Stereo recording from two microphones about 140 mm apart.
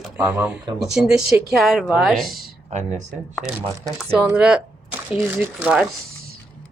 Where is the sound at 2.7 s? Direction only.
55° right (ahead or behind).